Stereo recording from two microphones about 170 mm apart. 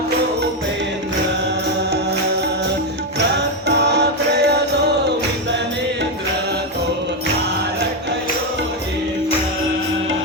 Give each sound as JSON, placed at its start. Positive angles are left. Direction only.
{"t": 3.7, "sound": "music", "side_deg": -80}